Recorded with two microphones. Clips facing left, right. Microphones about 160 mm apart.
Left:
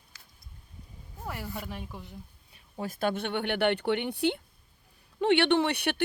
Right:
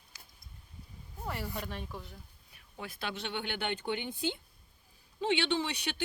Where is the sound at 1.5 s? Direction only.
10° left (ahead or behind).